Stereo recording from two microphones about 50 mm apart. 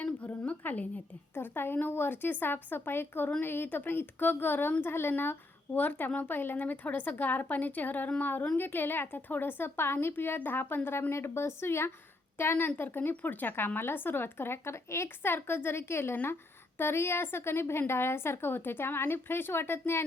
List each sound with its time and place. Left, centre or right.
0.0 s a sound: left
1.4 s a woman's voice: left
11.1 s a woman's voice: left
13.0 s a woman's voice: left
16.1 s a woman's voice: left